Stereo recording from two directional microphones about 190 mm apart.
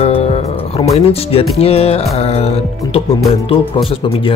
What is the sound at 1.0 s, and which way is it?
Speech, 30° left (ahead or behind).